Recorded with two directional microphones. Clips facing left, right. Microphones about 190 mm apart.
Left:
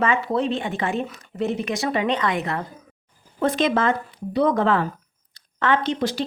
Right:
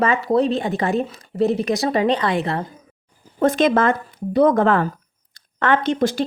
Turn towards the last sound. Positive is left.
turn(degrees=-50)  # may be behind; listen again after turning